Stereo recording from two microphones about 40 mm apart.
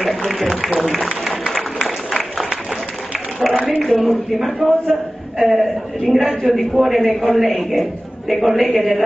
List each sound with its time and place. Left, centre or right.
0.2 s a man's voice: centre
1.5 s a sound: centre
3.5 s speech: centre
3.8 s a man's voice: centre